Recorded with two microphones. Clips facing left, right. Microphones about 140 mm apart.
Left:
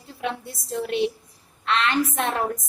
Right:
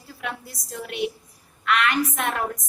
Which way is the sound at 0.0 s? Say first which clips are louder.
Left 4 dB; 25° left (ahead or behind).